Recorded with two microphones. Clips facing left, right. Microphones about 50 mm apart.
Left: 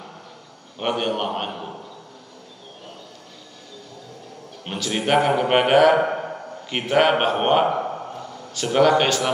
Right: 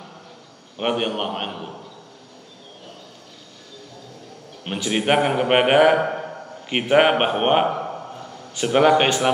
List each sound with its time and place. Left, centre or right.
0.7 s a man's voice: centre
1.5 s a man's voice: centre
4.6 s speech: centre
5.9 s a sound: centre
6.6 s speech: right
7.6 s a sound: centre
8.5 s speech: right